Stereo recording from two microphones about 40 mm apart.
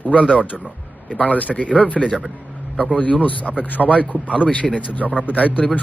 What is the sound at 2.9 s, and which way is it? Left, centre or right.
A man's voice, left.